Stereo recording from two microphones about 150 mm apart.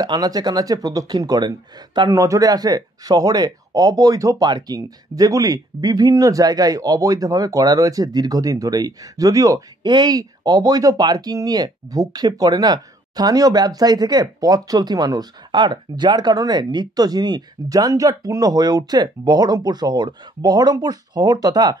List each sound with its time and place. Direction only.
0.0 s speech: 25° right (ahead or behind)